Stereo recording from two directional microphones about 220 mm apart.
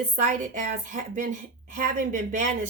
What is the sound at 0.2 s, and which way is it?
A woman's voice, 35° right (ahead or behind).